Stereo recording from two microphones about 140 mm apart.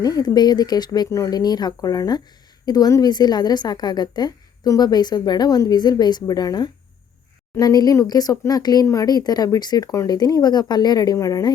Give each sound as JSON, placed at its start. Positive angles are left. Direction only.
{"t": 0.0, "sound": "a woman's voice", "side_deg": 30}